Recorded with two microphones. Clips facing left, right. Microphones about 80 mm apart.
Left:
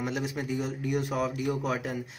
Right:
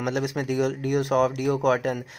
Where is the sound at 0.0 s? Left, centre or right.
Right.